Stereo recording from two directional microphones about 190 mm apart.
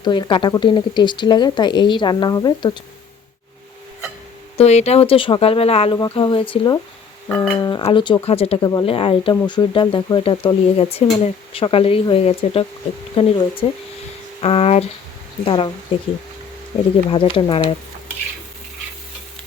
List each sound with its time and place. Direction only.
0.0 s speech: 25° left (ahead or behind)
4.5 s speech: 35° left (ahead or behind)
7.3 s speech: 10° left (ahead or behind)
7.6 s speech: 25° left (ahead or behind)
17.1 s speech: 25° left (ahead or behind)